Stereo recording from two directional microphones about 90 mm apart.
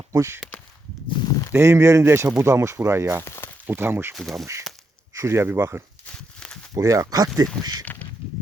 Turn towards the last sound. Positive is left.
turn(degrees=-45)  # may be behind; listen again after turning